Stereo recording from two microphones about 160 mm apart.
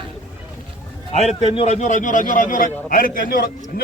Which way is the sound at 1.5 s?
40° left (ahead or behind).